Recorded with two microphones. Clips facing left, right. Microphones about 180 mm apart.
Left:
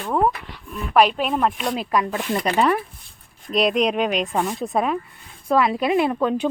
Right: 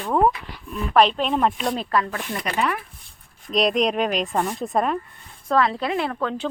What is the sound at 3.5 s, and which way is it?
Speech, centre (ahead or behind).